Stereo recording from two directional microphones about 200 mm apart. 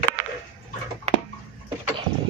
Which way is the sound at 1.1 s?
35° right (ahead or behind).